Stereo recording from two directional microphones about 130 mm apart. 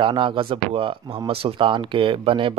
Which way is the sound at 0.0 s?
40° right (ahead or behind).